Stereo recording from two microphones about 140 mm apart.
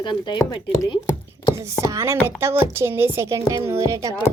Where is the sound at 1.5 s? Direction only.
20° right (ahead or behind).